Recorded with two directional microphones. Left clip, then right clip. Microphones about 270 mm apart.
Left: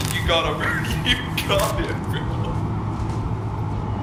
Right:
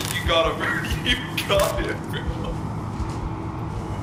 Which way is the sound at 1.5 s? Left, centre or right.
Centre.